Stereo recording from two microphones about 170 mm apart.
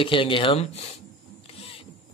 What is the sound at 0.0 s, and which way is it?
Speech, 30° left (ahead or behind).